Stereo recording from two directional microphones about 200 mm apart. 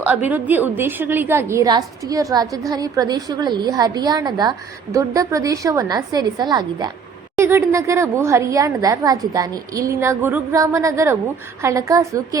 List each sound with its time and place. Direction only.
0.0 s a woman's voice: 10° right (ahead or behind)